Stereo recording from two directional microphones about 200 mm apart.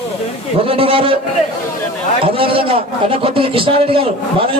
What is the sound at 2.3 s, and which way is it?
A man's voice, 25° right (ahead or behind).